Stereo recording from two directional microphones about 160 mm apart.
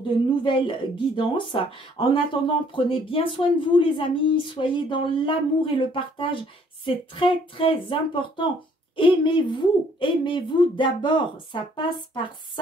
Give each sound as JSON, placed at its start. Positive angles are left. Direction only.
{"t": 0.4, "sound": "speech", "side_deg": 30}